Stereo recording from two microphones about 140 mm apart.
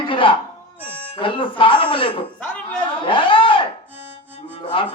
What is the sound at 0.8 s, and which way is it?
Music, 40° left (ahead or behind).